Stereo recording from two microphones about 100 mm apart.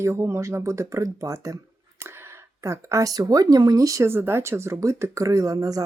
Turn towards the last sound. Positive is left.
turn(degrees=-35)  # may be behind; listen again after turning